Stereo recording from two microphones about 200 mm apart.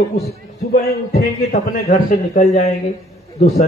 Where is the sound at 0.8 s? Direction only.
50° left (ahead or behind).